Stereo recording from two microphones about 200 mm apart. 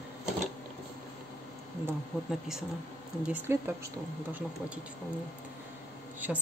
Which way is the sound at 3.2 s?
10° right (ahead or behind).